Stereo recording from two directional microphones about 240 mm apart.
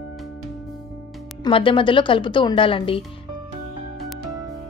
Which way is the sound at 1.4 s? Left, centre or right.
Left.